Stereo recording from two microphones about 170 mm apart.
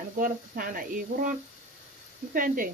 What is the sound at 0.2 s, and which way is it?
Speech, 55° right (ahead or behind).